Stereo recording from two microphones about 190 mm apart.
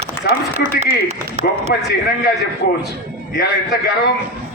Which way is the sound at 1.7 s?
55° left (ahead or behind).